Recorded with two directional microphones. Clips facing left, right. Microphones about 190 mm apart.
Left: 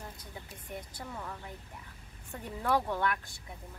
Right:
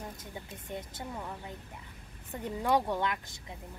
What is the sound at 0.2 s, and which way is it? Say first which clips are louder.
Speech: right 3 dB; 25° right (ahead or behind).